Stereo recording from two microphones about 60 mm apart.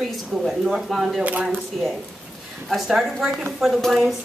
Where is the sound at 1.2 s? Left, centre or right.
Right.